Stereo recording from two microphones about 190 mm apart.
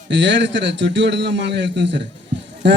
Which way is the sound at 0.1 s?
70° right (ahead or behind).